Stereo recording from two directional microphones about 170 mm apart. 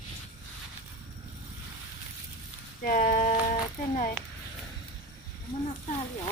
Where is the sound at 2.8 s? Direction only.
55° left (ahead or behind).